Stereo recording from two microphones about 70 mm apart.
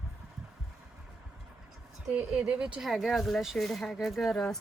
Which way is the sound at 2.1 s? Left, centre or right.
Centre.